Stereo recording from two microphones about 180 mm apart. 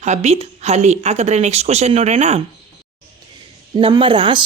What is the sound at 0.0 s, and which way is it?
A woman's voice, 40° right (ahead or behind).